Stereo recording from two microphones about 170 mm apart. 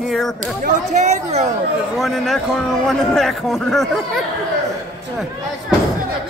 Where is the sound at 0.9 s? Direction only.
40° right (ahead or behind).